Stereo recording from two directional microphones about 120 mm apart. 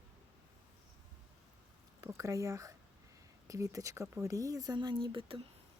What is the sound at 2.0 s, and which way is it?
Speech, 25° right (ahead or behind).